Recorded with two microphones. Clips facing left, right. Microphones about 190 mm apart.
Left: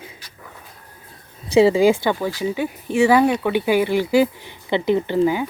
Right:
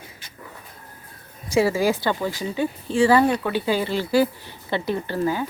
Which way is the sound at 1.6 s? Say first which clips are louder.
Left 6 dB; 20° left (ahead or behind).